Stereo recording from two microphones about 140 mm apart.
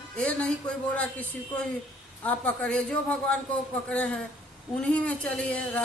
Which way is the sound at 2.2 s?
10° left (ahead or behind).